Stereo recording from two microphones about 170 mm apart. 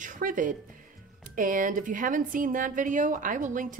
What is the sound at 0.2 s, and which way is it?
A woman's voice, 55° right (ahead or behind).